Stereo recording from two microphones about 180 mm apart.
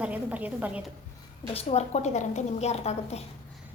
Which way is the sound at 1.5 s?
35° left (ahead or behind).